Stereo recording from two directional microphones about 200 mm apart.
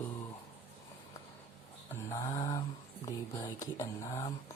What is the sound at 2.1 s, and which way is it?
Speech, 15° left (ahead or behind).